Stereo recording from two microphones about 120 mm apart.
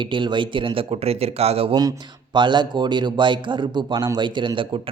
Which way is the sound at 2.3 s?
40° right (ahead or behind).